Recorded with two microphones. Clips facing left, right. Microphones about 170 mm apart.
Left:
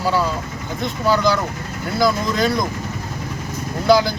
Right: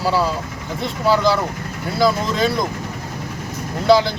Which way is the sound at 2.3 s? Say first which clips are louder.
Even; centre (ahead or behind).